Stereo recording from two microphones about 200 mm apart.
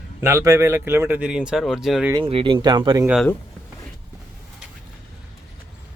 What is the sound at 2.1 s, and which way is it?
Speech, 25° right (ahead or behind).